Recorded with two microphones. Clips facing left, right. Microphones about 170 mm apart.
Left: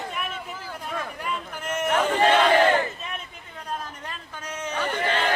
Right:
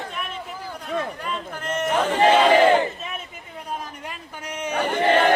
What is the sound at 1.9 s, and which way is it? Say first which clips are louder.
Battle cry: right 3 dB; 10° right (ahead or behind).